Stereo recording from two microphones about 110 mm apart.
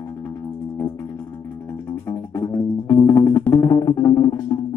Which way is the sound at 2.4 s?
30° left (ahead or behind).